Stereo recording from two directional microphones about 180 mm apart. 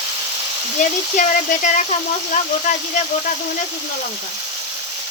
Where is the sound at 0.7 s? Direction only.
40° left (ahead or behind).